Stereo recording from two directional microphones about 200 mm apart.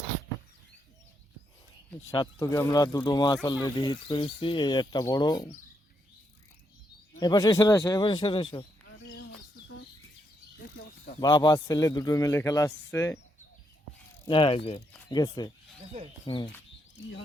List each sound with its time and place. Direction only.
2.0 s speech: 15° left (ahead or behind)
7.2 s speech: 20° left (ahead or behind)
11.2 s a man's voice: 20° left (ahead or behind)
14.3 s speech: 25° left (ahead or behind)